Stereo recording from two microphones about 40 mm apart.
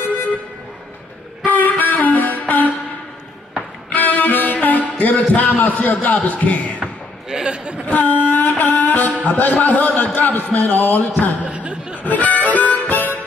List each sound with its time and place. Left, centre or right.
0.0 s vehicle: left
1.4 s music: left
3.9 s a man's voice: left
6.8 s a sound: centre
7.4 s a sound: right
7.8 s a sound: left
9.2 s a man's voice: left
11.4 s laughter: right
12.0 s harmonica: left